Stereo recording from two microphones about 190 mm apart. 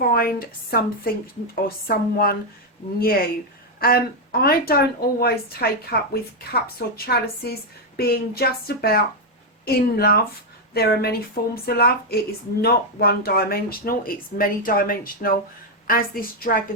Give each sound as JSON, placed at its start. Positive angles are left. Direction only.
{"t": 0.0, "sound": "speech", "side_deg": 50}